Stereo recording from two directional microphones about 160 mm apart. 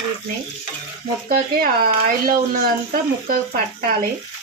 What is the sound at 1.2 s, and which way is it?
Speech, 70° right (ahead or behind).